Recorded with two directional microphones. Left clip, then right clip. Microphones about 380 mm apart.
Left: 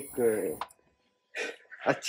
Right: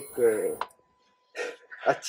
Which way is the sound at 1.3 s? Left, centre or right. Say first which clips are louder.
Right 1 dB; left.